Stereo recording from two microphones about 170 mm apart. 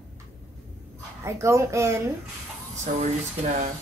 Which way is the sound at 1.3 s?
15° right (ahead or behind).